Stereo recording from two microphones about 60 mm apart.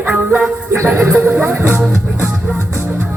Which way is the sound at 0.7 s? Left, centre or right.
Right.